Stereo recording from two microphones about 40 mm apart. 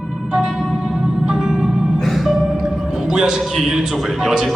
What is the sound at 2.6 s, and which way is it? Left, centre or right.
Music, centre.